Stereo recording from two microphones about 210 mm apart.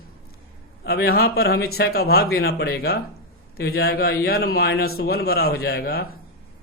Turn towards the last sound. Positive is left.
turn(degrees=45)  # may be behind; listen again after turning